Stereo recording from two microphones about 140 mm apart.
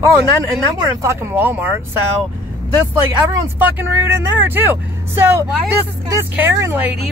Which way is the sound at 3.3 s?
15° right (ahead or behind).